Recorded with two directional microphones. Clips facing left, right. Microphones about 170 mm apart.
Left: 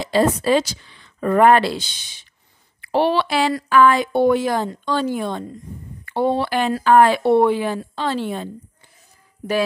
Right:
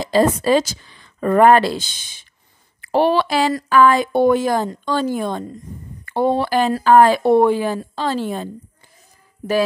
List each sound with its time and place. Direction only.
0.0 s speech: 40° right (ahead or behind)